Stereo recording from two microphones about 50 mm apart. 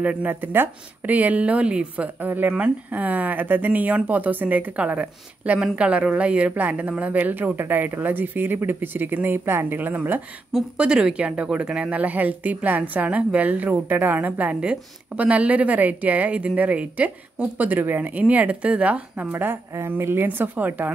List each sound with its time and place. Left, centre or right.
0.0 s speech: right
0.3 s speech: right
2.2 s speech: right
10.8 s speech: centre; by 14.3 s right
14.6 s speech: right
19.3 s speech: right
20.2 s speech: right